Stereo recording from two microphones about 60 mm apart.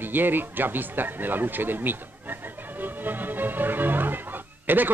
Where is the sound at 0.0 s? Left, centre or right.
Right.